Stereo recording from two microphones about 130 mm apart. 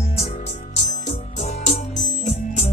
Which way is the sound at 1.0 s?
65° left (ahead or behind).